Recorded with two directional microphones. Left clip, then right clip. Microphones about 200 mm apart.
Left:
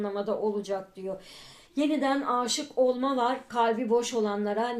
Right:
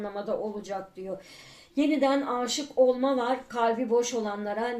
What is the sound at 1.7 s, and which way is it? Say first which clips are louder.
Speech: right 2 dB; 30° left (ahead or behind).